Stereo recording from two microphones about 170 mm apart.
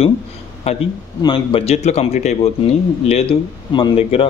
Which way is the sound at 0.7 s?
40° left (ahead or behind).